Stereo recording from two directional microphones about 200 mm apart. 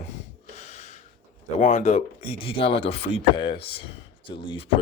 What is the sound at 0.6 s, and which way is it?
Gasp, 35° left (ahead or behind).